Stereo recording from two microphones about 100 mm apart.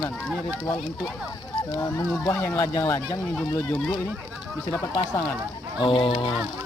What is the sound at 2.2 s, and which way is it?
Speech, 25° left (ahead or behind).